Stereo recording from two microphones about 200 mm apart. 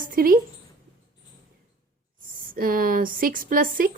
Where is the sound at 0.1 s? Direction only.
45° right (ahead or behind).